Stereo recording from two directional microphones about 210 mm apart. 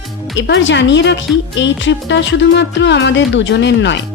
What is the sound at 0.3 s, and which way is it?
A woman's voice, 60° left (ahead or behind).